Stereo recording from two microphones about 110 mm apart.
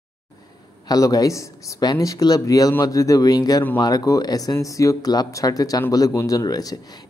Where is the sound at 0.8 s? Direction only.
35° left (ahead or behind).